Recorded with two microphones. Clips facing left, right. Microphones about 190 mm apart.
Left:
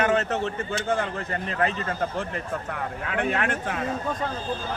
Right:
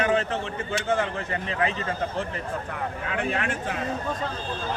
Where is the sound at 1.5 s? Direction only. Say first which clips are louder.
Left 1 dB; 50° left (ahead or behind).